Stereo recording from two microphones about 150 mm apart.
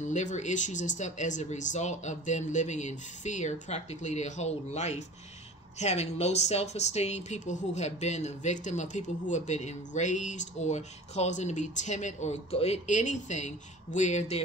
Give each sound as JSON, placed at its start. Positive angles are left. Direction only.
{"t": 0.0, "sound": "speech", "side_deg": 55}